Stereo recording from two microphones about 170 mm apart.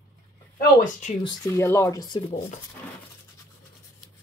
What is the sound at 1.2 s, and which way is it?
Speech, 15° left (ahead or behind).